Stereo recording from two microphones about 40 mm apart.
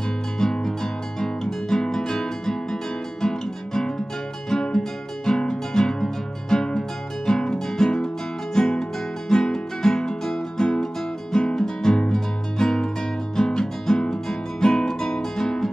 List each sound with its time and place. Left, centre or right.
0.4 s music: centre